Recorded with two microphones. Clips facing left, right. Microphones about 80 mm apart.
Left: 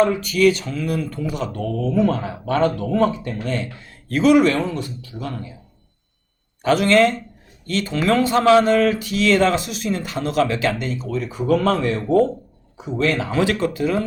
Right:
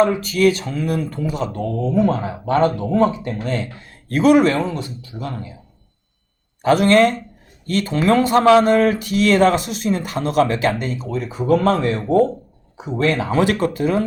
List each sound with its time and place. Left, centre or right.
0.3 s speech: right
1.3 s a man's voice: right
6.7 s speech: right
13.4 s speech: right